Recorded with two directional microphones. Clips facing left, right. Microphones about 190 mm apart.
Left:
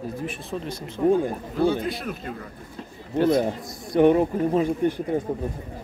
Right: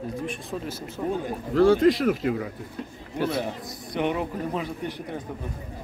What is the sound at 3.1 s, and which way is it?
Speech, 10° right (ahead or behind).